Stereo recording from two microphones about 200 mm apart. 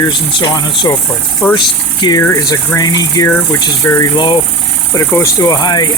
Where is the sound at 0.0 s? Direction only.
25° left (ahead or behind).